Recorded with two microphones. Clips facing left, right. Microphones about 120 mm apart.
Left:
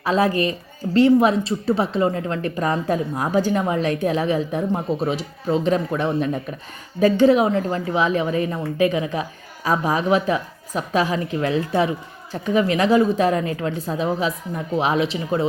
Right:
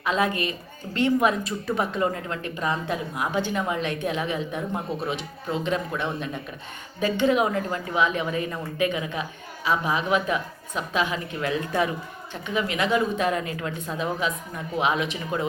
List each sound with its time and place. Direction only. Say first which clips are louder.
0.0 s speech: left 6 dB; 35° left (ahead or behind)